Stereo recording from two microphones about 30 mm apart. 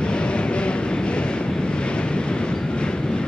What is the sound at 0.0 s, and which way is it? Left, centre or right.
Vehicle, left.